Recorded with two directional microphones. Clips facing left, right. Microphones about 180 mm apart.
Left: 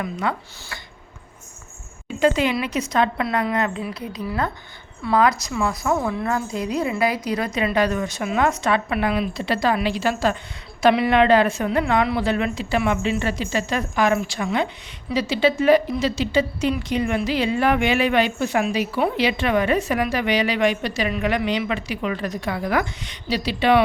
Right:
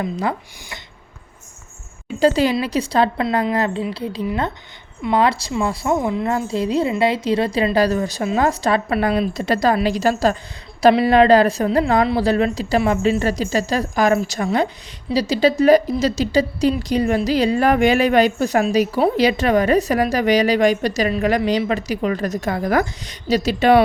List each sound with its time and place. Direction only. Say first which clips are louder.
0.0 s speech: right 3 dB; 30° right (ahead or behind)
2.1 s speech: right 3 dB; 35° right (ahead or behind)